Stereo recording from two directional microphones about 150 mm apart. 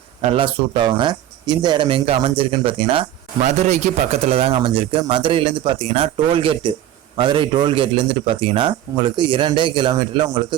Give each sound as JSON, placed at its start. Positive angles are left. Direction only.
{"t": 0.2, "sound": "a man's voice", "side_deg": -35}
{"t": 3.4, "sound": "a man's voice", "side_deg": -50}